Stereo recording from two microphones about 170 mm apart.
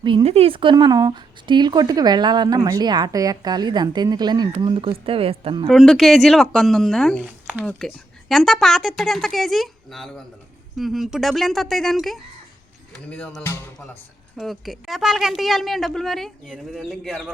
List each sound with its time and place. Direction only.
0.0 s speech: 30° right (ahead or behind)
5.6 s a woman's voice: centre (ahead or behind)
14.3 s a woman's voice: centre (ahead or behind)